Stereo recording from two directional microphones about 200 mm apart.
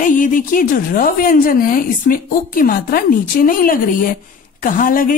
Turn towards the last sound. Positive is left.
turn(degrees=45)  # may be behind; listen again after turning